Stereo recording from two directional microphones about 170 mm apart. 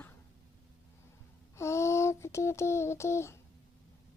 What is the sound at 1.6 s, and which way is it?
A woman's voice, 15° left (ahead or behind).